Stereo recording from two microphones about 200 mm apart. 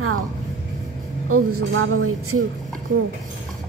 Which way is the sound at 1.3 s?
90° right.